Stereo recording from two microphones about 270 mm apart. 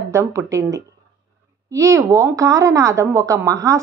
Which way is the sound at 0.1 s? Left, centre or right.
Centre.